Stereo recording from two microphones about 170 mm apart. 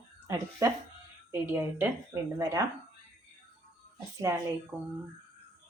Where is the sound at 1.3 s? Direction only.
10° right (ahead or behind).